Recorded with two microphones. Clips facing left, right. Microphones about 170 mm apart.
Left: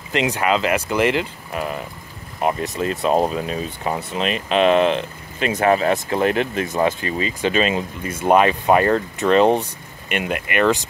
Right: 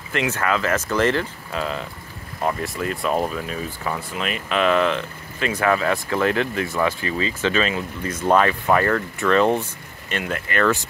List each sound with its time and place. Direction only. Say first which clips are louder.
0.1 s speech: left 3 dB; 20° left (ahead or behind)
8.0 s speech: left 2 dB; 10° left (ahead or behind)